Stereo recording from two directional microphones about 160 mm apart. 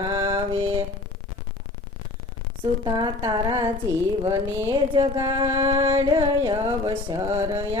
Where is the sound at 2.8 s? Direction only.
30° right (ahead or behind).